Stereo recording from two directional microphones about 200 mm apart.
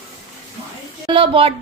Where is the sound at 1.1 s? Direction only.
25° right (ahead or behind).